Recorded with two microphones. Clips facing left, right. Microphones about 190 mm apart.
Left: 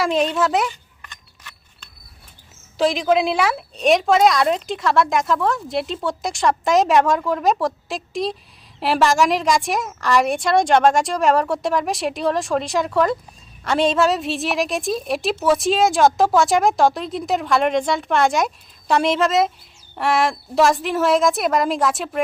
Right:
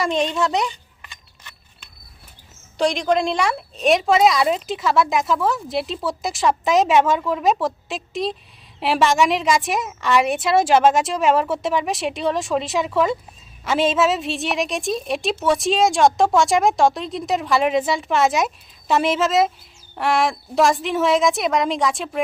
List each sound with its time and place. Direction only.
0.0 s a woman's voice: centre (ahead or behind)
0.7 s a sound: 15° right (ahead or behind)
2.7 s a woman's voice: centre (ahead or behind)